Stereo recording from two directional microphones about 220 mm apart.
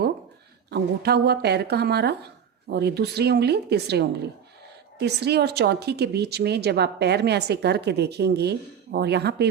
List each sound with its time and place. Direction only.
0.7 s a woman's voice: 45° right (ahead or behind)